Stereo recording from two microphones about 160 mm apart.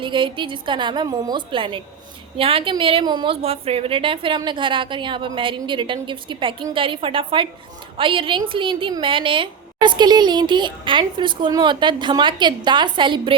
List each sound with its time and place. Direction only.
0.0 s a woman's voice: 30° right (ahead or behind)